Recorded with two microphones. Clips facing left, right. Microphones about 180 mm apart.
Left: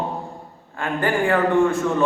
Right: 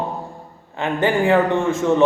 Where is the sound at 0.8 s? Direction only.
20° right (ahead or behind).